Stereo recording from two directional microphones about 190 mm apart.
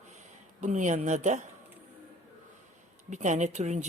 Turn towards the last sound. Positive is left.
turn(degrees=-40)  # may be behind; listen again after turning